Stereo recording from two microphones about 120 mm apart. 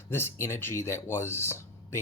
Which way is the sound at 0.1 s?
20° left (ahead or behind).